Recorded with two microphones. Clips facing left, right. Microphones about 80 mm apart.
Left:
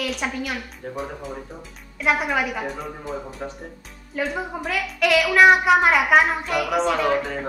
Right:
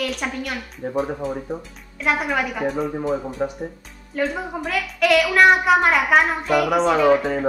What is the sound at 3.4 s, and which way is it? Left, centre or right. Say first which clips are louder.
Speech: right 8 dB; centre.